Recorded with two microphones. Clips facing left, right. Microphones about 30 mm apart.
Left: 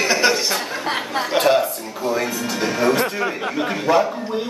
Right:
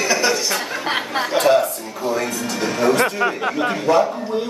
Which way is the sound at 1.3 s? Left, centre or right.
Centre.